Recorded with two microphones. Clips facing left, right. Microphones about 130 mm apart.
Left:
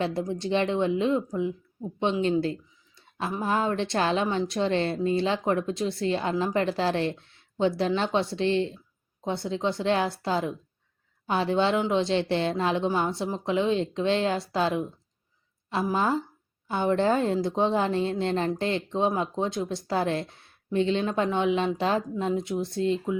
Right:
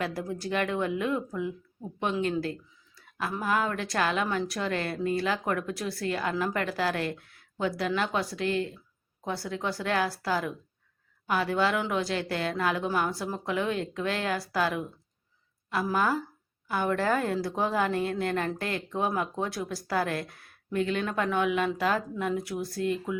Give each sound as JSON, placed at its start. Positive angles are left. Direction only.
{"t": 0.0, "sound": "a woman's voice", "side_deg": 25}